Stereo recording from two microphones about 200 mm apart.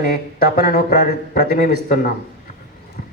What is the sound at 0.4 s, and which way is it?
A woman's voice, 45° left (ahead or behind).